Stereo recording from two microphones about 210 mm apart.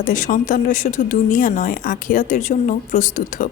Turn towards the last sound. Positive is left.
turn(degrees=40)  # may be behind; listen again after turning